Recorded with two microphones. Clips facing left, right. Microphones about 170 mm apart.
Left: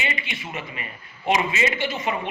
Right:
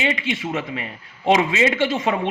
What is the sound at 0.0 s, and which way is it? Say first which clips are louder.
Speech: right 8 dB; 90° right.